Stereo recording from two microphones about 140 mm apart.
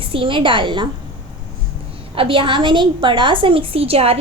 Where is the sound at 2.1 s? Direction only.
40° right (ahead or behind).